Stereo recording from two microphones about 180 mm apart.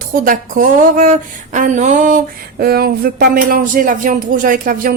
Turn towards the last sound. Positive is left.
turn(degrees=-50)  # may be behind; listen again after turning